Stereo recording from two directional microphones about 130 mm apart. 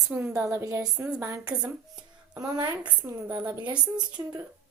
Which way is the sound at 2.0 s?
30° right (ahead or behind).